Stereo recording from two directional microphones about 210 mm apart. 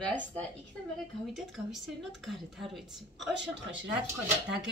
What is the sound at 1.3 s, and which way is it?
A woman's voice, centre (ahead or behind).